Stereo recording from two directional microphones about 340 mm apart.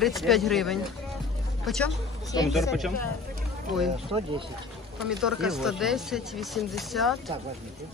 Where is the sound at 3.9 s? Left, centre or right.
Centre.